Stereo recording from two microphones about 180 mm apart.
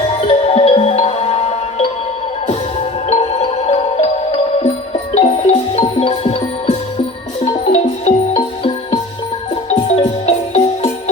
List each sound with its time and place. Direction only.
0.2 s music: 35° left (ahead or behind)